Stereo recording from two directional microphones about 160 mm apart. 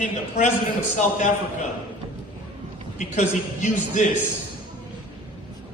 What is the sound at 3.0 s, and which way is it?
A man's voice, 50° left (ahead or behind).